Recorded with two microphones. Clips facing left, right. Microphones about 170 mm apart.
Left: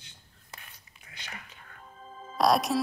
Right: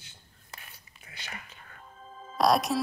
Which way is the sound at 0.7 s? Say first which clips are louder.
Right 2 dB; 5° right (ahead or behind).